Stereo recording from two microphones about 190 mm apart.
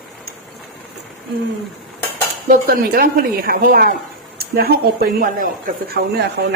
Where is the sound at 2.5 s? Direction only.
50° right (ahead or behind).